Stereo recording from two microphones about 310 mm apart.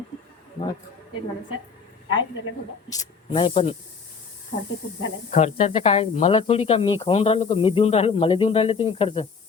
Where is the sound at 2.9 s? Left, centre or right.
Centre.